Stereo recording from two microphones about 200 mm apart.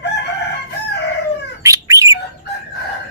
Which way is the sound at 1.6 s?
15° right (ahead or behind).